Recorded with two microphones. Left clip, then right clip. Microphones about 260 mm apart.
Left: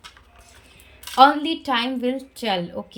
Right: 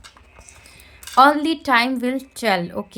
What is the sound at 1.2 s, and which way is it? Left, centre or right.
A woman's voice, centre.